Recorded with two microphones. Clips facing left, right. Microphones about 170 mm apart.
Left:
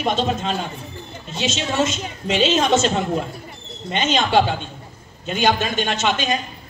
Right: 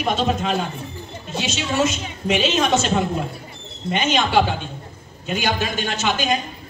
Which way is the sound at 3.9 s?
25° left (ahead or behind).